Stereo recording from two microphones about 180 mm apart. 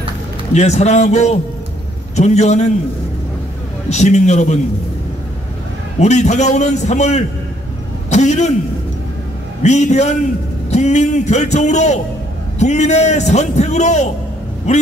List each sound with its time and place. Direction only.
0.6 s a man's voice: 40° left (ahead or behind)
3.9 s a man's voice: 40° left (ahead or behind)
5.9 s a man's voice: 40° left (ahead or behind)
8.1 s a sound: 40° left (ahead or behind)
9.6 s a man's voice: 40° left (ahead or behind)